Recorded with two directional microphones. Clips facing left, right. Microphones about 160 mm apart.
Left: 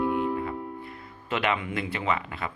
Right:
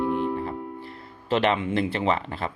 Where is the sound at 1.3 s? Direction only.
30° right (ahead or behind).